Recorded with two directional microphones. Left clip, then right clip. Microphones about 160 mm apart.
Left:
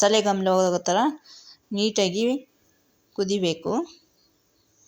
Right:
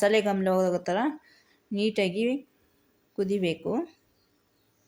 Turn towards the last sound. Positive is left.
turn(degrees=15)  # may be behind; listen again after turning